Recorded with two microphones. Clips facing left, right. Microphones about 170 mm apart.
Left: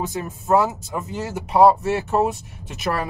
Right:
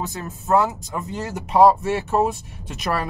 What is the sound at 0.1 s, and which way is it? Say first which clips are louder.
Speech: even; 10° left (ahead or behind).